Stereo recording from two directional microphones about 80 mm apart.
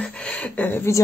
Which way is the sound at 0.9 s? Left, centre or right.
Left.